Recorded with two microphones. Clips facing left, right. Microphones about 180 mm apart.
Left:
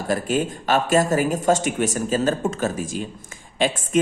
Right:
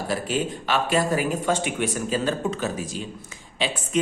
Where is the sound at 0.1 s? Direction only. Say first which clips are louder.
Left 5 dB; 45° left (ahead or behind).